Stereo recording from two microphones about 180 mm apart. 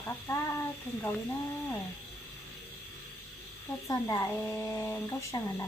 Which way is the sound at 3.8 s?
20° left (ahead or behind).